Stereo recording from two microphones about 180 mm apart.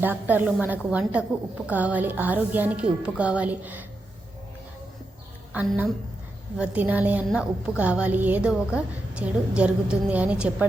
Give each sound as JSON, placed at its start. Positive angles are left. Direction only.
{"t": 0.0, "sound": "a woman's voice", "side_deg": -10}
{"t": 5.5, "sound": "a woman's voice", "side_deg": -10}